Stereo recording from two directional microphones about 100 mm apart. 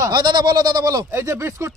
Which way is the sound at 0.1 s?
45° right (ahead or behind).